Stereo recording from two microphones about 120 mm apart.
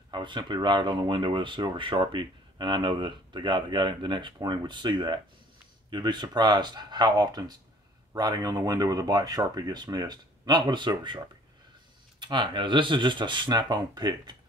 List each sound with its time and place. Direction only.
0.1 s speech: 40° right (ahead or behind)